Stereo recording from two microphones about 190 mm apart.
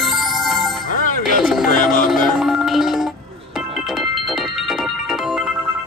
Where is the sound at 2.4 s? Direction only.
Centre (ahead or behind).